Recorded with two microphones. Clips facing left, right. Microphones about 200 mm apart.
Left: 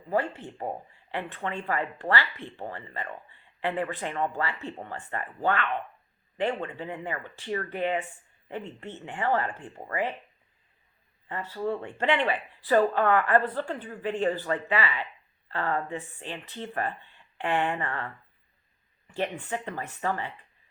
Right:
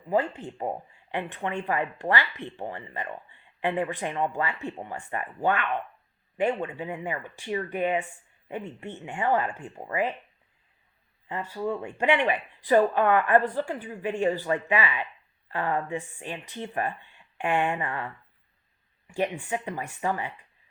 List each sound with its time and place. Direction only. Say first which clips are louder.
0.1 s speech: right 2 dB; 15° right (ahead or behind)
11.3 s speech: right 1 dB; 15° right (ahead or behind)